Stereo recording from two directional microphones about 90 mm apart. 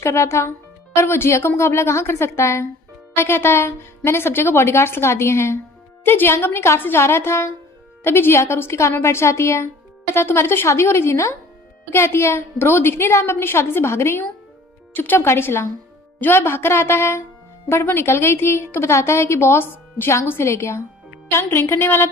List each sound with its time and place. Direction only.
0.0 s a woman's voice: 30° left (ahead or behind)